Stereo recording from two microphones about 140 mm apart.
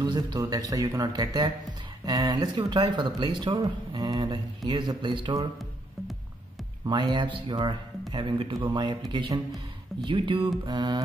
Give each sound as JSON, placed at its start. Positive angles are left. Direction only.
{"t": 0.0, "sound": "speech", "side_deg": -30}
{"t": 6.9, "sound": "speech", "side_deg": -35}